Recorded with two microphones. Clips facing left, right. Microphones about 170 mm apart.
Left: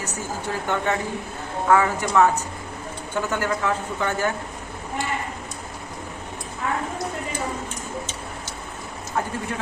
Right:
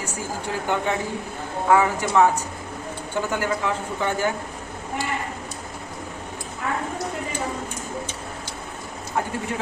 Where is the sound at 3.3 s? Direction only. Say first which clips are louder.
Left 1 dB; 15° right (ahead or behind).